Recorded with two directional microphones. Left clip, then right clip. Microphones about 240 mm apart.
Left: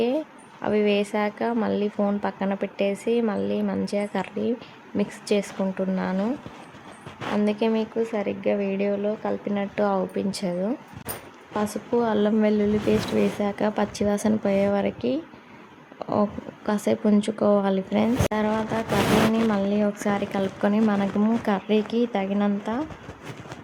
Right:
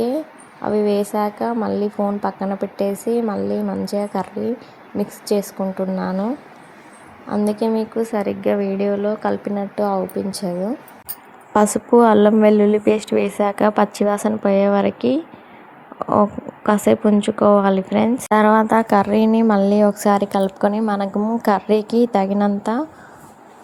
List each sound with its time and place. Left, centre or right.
0.6 s speech: centre
7.6 s speech: centre
11.5 s a woman's voice: right